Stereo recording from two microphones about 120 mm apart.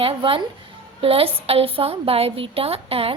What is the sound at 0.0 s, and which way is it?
A woman's voice, 50° right (ahead or behind).